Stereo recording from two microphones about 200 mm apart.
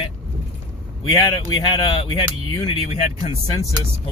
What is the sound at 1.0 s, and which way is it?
Speech, 25° left (ahead or behind).